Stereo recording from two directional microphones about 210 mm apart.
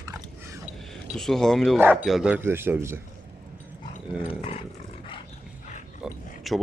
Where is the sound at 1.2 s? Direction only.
Centre (ahead or behind).